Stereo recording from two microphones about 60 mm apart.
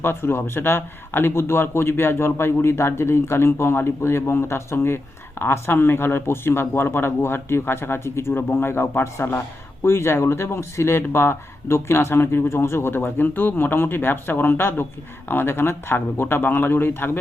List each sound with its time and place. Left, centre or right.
0.0 s a man's voice: left
8.3 s speech: left